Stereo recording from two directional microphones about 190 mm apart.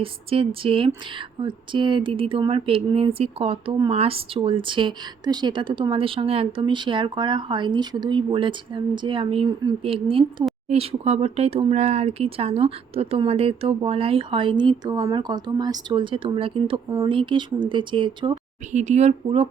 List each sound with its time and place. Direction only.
0.0 s speech: 30° right (ahead or behind)
18.7 s speech: 40° right (ahead or behind)